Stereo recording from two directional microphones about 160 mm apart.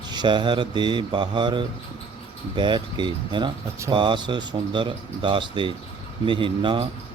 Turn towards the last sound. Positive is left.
turn(degrees=-30)  # may be behind; listen again after turning